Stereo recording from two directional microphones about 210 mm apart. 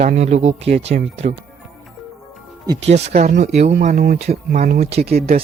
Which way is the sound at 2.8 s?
30° right (ahead or behind).